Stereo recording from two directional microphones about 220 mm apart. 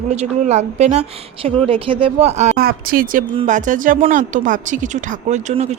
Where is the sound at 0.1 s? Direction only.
30° right (ahead or behind).